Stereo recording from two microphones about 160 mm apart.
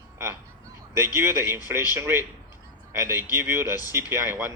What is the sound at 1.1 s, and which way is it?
Speech, 15° right (ahead or behind).